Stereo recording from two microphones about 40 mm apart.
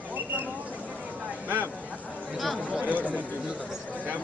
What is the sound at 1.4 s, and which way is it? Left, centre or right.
Vehicle, right.